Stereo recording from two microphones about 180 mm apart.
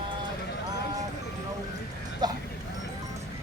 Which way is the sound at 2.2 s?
25° right (ahead or behind).